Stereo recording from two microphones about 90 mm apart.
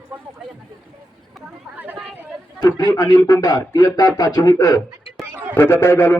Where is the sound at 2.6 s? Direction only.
50° left (ahead or behind).